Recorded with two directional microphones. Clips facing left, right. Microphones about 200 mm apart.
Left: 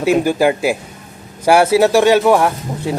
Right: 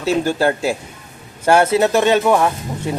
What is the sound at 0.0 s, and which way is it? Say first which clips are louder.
Speech: left 3 dB; 15° left (ahead or behind).